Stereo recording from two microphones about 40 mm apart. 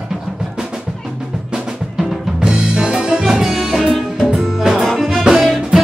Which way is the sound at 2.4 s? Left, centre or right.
Right.